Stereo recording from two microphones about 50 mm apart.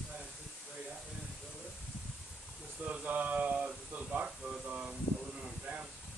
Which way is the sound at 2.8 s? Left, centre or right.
Right.